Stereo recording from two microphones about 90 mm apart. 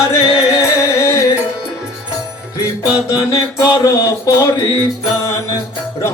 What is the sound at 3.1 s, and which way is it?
Mantra, 35° left (ahead or behind).